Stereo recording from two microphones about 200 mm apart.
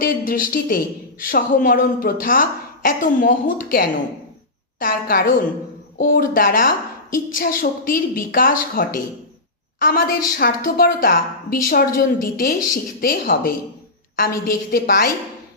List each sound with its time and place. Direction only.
0.0 s a woman's voice: 45° left (ahead or behind)